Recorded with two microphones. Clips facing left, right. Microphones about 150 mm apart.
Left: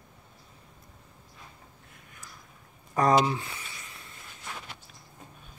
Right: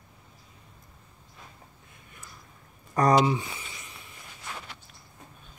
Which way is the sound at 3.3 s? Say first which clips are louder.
Right 4 dB; 15° right (ahead or behind).